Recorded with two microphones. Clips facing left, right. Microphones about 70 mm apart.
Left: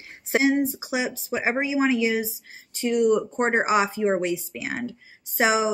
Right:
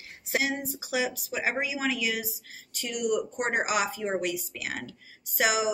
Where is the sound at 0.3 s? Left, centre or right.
Left.